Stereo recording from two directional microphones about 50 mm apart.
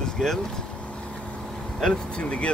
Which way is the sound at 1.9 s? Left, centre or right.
Left.